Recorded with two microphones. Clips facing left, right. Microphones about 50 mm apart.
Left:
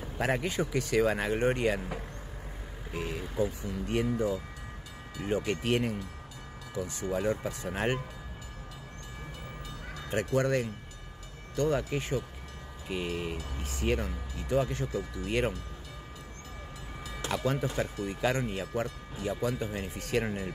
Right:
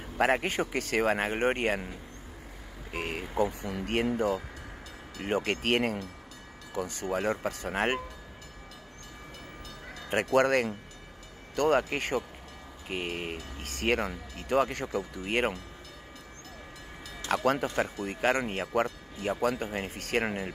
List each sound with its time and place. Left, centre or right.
0.2 s speech: right
2.9 s speech: right
10.0 s speech: right
12.8 s speech: right
13.6 s speech: right
14.9 s speech: right
17.3 s speech: right
17.6 s speech: right